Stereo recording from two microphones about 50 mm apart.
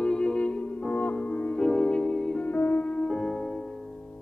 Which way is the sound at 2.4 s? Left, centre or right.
Left.